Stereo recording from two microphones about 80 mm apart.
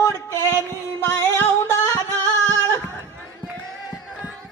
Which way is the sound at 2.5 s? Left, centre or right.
Right.